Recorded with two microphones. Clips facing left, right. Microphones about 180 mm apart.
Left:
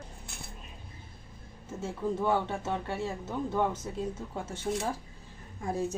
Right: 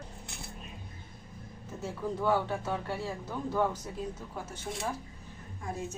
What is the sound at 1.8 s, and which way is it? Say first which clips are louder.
Speech: left 2 dB; 25° left (ahead or behind).